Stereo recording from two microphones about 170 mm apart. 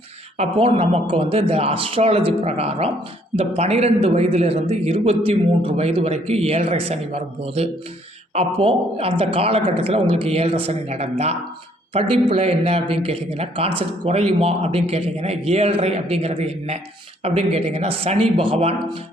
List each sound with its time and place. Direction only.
0.3 s a man's voice: 35° right (ahead or behind)